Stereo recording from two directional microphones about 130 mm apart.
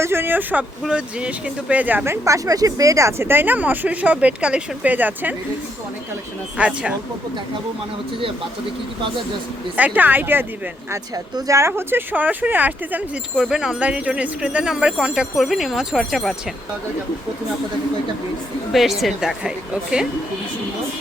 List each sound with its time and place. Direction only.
0.0 s speech: 20° right (ahead or behind)
6.6 s speech: 10° right (ahead or behind)
9.7 s speech: 10° right (ahead or behind)
10.9 s speech: 25° right (ahead or behind)
13.3 s speech: 5° right (ahead or behind)
18.7 s speech: centre (ahead or behind)